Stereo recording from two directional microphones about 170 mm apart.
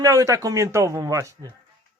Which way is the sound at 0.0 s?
20° right (ahead or behind).